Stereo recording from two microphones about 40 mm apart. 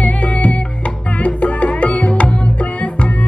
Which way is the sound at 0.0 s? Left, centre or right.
Left.